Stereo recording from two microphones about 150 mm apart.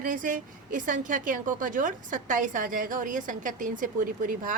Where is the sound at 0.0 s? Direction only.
65° right (ahead or behind).